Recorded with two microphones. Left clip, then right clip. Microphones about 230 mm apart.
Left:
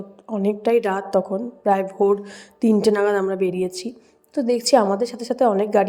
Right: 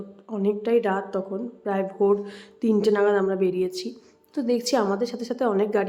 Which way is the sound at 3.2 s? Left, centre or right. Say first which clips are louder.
Left 2 dB; centre.